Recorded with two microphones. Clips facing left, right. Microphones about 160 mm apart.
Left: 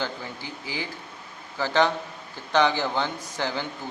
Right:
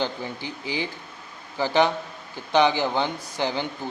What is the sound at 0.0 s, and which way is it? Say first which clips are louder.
A man's voice: right 4 dB; 20° right (ahead or behind).